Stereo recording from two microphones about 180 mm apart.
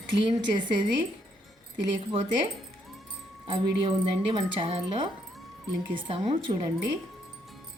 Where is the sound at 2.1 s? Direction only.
30° right (ahead or behind).